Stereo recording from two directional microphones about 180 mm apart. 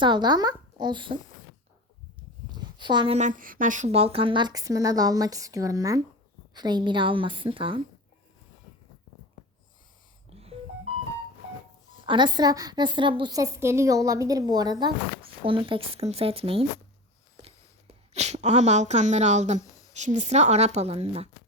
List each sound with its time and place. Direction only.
0.0 s a woman's voice: 25° right (ahead or behind)
2.5 s a sound: 25° right (ahead or behind)
3.2 s a woman's voice: 45° right (ahead or behind); by 7.8 s 30° right (ahead or behind)
10.2 s wheeze: 35° right (ahead or behind)
12.0 s a woman's voice: 25° right (ahead or behind)
18.1 s a woman's voice: 40° right (ahead or behind)